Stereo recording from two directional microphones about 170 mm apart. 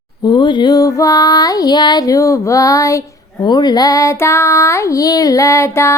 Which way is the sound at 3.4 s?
25° left (ahead or behind).